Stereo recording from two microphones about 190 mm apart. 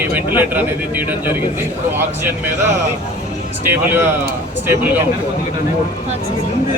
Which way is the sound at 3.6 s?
10° right (ahead or behind).